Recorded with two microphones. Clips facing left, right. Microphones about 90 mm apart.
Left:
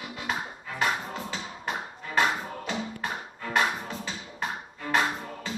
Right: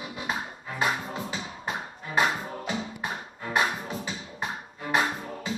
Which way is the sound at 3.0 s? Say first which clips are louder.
Even; 15° right (ahead or behind).